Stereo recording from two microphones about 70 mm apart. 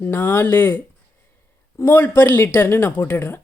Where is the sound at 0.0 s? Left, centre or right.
Left.